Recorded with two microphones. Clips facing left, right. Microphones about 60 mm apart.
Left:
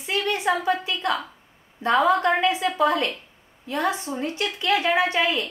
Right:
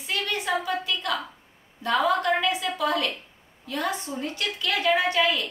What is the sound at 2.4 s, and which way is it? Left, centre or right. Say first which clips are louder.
A woman's voice: left 5 dB; left.